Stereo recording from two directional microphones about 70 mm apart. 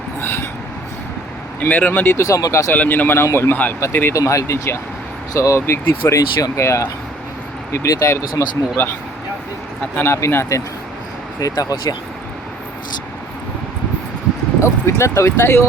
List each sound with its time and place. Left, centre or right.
0.2 s vehicle: left
1.6 s speech: left
2.1 s speech: left
2.7 s speech: left
3.5 s speech: left
4.1 s speech: left
10.0 s speech: left
11.3 s speech: left
14.6 s speech: left